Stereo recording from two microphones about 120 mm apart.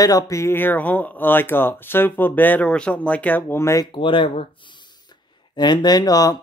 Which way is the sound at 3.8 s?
45° left (ahead or behind).